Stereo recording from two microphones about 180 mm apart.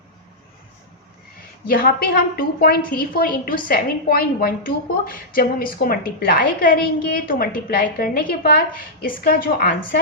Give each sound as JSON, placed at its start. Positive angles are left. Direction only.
{"t": 1.6, "sound": "a woman's voice", "side_deg": 55}